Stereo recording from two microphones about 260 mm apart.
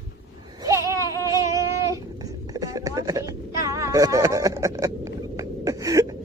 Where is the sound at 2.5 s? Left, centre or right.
Centre.